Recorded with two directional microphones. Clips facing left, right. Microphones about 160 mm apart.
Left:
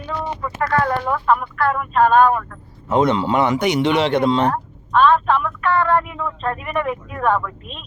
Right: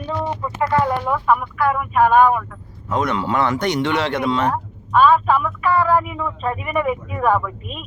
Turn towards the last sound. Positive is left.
turn(degrees=-5)  # may be behind; listen again after turning